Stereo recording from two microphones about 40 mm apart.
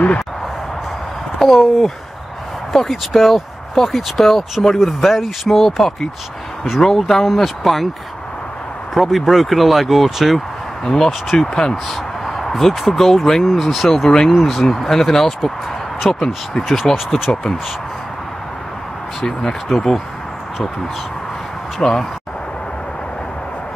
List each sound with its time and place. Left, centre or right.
1.4 s speech: centre
8.9 s speech: centre
11.3 s speech: centre
13.4 s speech: centre
14.0 s speech: centre
14.3 s speech: centre
16.6 s speech: centre
16.9 s speech: centre
17.3 s speech: centre
19.2 s speech: centre
21.8 s speech: centre